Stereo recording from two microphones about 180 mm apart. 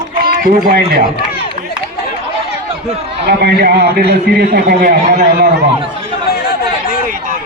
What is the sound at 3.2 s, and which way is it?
A man's voice, 65° right (ahead or behind).